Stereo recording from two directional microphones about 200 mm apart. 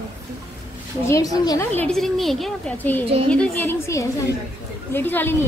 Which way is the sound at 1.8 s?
Centre (ahead or behind).